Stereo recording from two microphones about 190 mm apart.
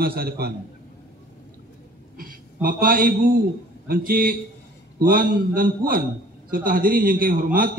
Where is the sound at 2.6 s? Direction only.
50° right (ahead or behind).